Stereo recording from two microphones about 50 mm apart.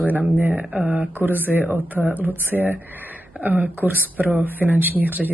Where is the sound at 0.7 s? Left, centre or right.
Right.